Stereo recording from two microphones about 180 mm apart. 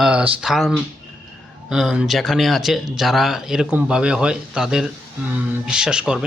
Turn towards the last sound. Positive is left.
turn(degrees=-5)  # may be behind; listen again after turning